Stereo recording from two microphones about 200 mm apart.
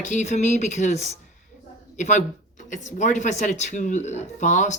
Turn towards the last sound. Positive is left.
turn(degrees=35)  # may be behind; listen again after turning